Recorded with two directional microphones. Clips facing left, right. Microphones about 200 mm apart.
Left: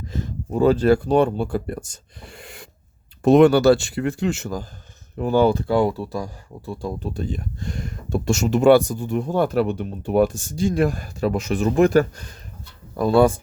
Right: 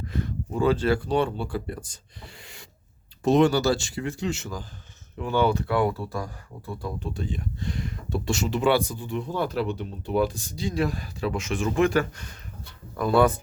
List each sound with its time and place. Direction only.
0.5 s speech: 40° left (ahead or behind); by 6.9 s 25° left (ahead or behind)
7.0 s speech: 40° left (ahead or behind)
13.0 s speech: 30° left (ahead or behind)